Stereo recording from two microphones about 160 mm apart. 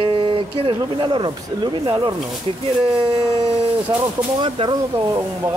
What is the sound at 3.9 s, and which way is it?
Speech, 25° right (ahead or behind).